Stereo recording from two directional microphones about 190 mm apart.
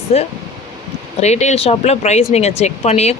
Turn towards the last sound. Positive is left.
turn(degrees=35)  # may be behind; listen again after turning